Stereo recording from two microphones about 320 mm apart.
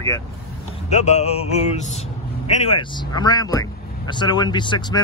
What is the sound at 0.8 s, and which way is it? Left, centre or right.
Speech, left.